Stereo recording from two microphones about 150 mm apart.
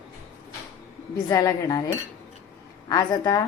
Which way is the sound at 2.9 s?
25° left (ahead or behind).